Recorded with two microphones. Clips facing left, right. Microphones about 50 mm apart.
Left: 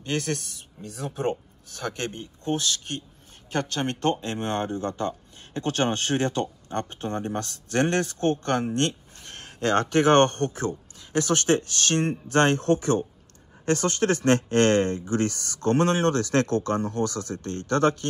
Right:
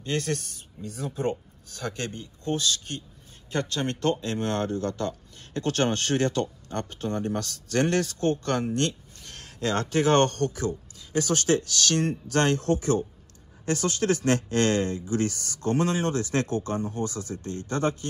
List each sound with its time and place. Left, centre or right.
0.0 s speech: left